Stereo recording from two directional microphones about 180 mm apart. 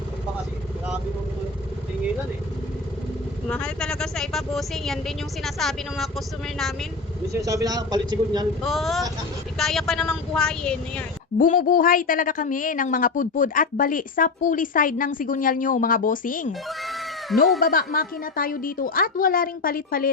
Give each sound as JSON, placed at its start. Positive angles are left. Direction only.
{"t": 3.5, "sound": "speech", "side_deg": 5}
{"t": 7.3, "sound": "speech", "side_deg": -20}
{"t": 8.6, "sound": "speech", "side_deg": 0}
{"t": 11.3, "sound": "a woman's voice", "side_deg": 50}
{"t": 16.5, "sound": "cat", "side_deg": 0}
{"t": 17.6, "sound": "a woman's voice", "side_deg": 50}